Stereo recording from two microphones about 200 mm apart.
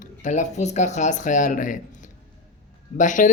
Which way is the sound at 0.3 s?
35° left (ahead or behind).